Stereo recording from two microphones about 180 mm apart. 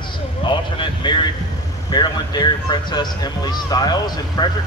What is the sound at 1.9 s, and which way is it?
Speech, 25° left (ahead or behind).